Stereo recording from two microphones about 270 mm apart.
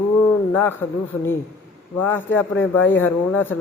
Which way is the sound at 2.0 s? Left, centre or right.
Centre.